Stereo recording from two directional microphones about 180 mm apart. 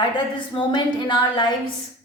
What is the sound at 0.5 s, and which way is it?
Speech, 25° left (ahead or behind).